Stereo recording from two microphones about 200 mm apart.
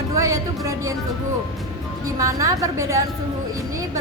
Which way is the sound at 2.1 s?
15° right (ahead or behind).